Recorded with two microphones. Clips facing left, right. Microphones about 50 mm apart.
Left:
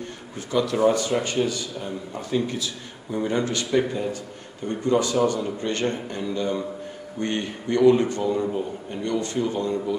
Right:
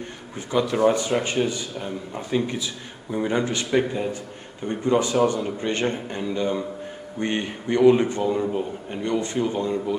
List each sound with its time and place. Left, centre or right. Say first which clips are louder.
0.5 s a man's voice: even; right